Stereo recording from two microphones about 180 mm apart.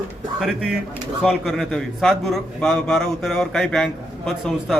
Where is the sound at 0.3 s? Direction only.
5° right (ahead or behind).